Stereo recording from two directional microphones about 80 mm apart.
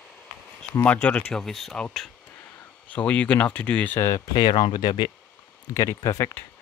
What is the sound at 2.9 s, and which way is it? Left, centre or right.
Speech, centre.